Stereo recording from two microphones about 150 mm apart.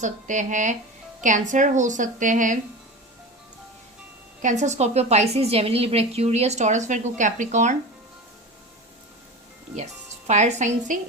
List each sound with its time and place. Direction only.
0.0 s a woman's voice: 55° right (ahead or behind)
4.4 s a woman's voice: 50° right (ahead or behind)
9.7 s speech: 50° right (ahead or behind)